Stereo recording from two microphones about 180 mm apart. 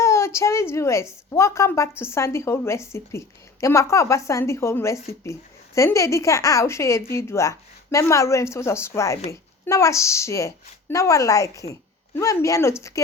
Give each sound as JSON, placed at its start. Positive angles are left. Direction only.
{"t": 0.0, "sound": "a woman's voice", "side_deg": 15}